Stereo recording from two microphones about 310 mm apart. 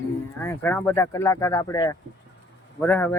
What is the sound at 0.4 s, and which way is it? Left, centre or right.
Speech, centre.